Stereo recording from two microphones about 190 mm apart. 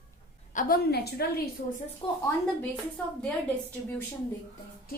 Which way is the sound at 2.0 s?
30° left (ahead or behind).